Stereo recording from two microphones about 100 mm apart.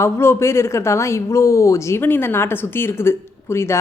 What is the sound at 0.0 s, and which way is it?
A woman's voice, 25° left (ahead or behind).